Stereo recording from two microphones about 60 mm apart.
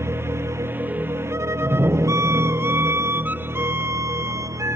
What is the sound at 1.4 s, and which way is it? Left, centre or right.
Music, right.